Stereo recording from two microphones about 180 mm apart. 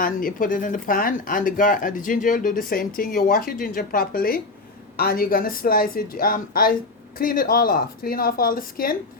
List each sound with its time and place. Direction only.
0.0 s speech: 50° left (ahead or behind)